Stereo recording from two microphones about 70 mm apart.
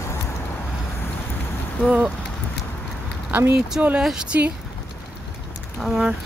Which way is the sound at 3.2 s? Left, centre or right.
Right.